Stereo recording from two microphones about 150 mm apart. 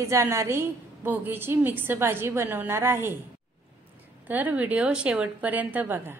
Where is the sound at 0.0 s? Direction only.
20° right (ahead or behind).